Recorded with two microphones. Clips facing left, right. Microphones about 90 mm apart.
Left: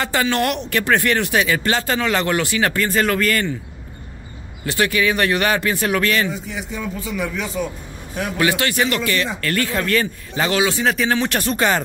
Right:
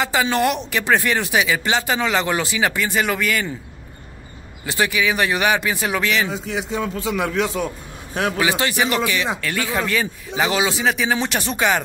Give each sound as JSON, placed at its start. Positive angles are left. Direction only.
{"t": 0.0, "sound": "speech", "side_deg": -10}
{"t": 4.6, "sound": "speech", "side_deg": -15}
{"t": 6.3, "sound": "a man's voice", "side_deg": -90}
{"t": 8.4, "sound": "speech", "side_deg": -15}
{"t": 11.1, "sound": "speech", "side_deg": -15}